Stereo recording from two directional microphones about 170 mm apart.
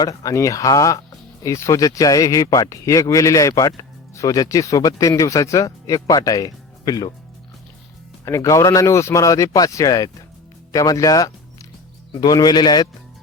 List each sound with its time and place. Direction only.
0.0 s speech: 20° left (ahead or behind)
8.2 s speech: 15° left (ahead or behind)